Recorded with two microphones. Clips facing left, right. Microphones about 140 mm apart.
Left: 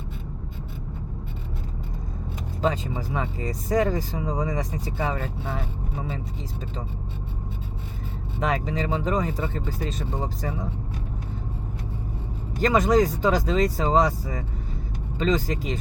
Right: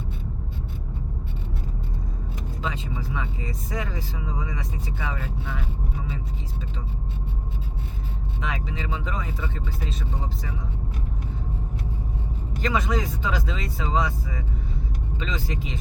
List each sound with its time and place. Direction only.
2.6 s speech: 40° left (ahead or behind)
8.4 s speech: 40° left (ahead or behind)
12.6 s speech: 40° left (ahead or behind)